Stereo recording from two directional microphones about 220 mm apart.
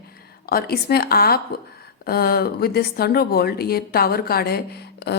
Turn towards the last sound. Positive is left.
turn(degrees=45)  # may be behind; listen again after turning